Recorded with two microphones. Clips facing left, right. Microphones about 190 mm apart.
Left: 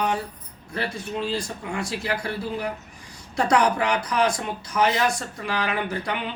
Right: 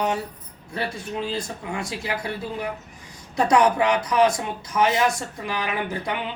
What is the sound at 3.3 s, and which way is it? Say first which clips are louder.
Speech: right 2 dB; 20° right (ahead or behind).